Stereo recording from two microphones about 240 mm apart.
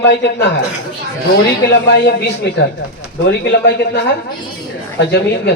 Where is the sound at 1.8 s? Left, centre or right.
Left.